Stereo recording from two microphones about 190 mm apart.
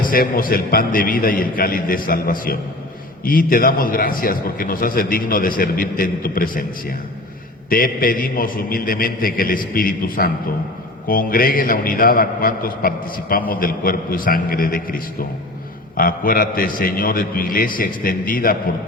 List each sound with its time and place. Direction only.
0.0 s a man's voice: 50° left (ahead or behind)
7.7 s a man's voice: 50° left (ahead or behind)